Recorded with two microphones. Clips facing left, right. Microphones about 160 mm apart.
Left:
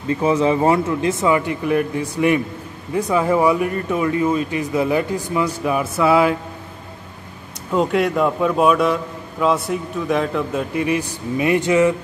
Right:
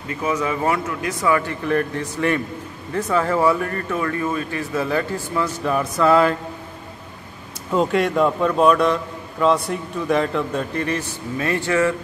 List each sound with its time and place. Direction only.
0.1 s speech: 30° left (ahead or behind); by 6.3 s 10° left (ahead or behind)
7.7 s a man's voice: centre (ahead or behind); by 11.9 s 15° left (ahead or behind)